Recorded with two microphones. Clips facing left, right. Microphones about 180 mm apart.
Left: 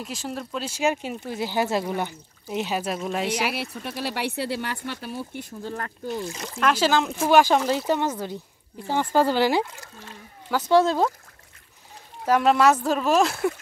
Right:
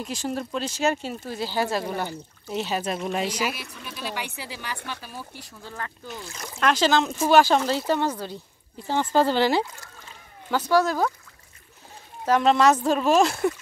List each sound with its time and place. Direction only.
0.0 s speech: centre (ahead or behind)
0.7 s speech: 10° left (ahead or behind)
3.3 s speech: 65° left (ahead or behind)
5.6 s speech: 40° left (ahead or behind)
6.6 s speech: 10° left (ahead or behind)
10.7 s speech: 25° left (ahead or behind)
12.3 s speech: 10° left (ahead or behind)